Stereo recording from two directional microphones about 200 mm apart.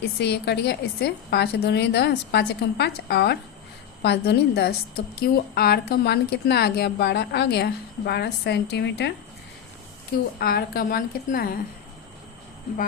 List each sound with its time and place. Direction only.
0.0 s a woman's voice: 55° left (ahead or behind)
10.3 s a woman's voice: 50° left (ahead or behind)